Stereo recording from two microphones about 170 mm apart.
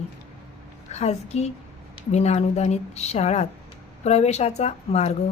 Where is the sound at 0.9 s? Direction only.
40° left (ahead or behind).